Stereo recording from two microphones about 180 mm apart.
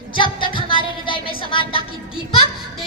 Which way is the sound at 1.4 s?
30° left (ahead or behind).